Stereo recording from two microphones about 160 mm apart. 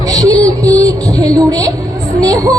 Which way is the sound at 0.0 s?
20° right (ahead or behind).